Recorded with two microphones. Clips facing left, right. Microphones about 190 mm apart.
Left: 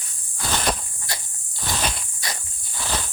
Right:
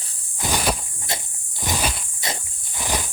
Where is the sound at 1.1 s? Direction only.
20° right (ahead or behind).